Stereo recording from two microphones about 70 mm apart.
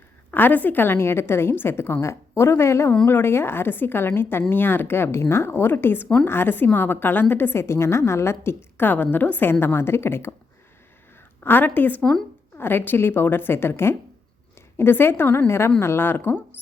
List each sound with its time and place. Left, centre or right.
0.3 s a woman's voice: left
11.4 s a woman's voice: left